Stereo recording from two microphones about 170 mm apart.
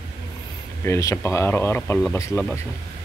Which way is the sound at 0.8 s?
15° left (ahead or behind).